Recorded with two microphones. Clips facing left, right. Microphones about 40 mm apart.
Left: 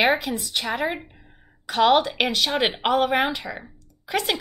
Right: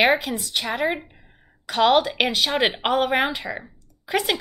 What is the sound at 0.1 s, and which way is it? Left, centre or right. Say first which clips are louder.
A woman's voice: right 1 dB; centre.